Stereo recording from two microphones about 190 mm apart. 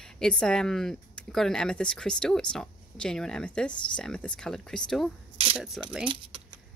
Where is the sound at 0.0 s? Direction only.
5° left (ahead or behind).